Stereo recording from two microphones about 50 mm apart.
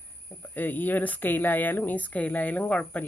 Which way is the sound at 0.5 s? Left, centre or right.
Left.